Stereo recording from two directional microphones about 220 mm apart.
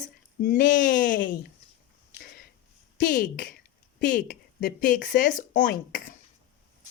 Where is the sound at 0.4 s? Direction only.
35° left (ahead or behind).